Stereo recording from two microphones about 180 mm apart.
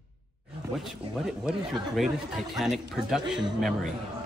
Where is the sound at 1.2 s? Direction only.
Centre (ahead or behind).